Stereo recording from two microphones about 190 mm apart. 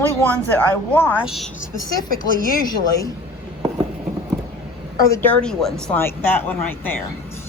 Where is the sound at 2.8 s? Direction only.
20° left (ahead or behind).